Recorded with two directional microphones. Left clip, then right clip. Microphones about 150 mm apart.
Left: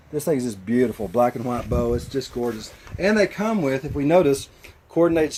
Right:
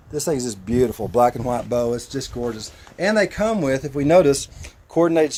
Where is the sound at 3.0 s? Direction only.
90° right.